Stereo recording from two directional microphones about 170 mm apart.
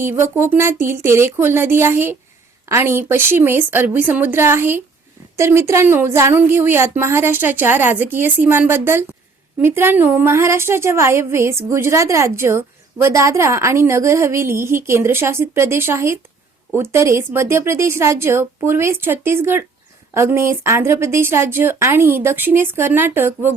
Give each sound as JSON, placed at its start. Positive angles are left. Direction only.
{"t": 0.0, "sound": "a woman's voice", "side_deg": -15}